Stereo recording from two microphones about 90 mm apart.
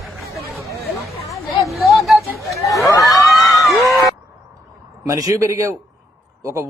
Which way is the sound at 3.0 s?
Centre (ahead or behind).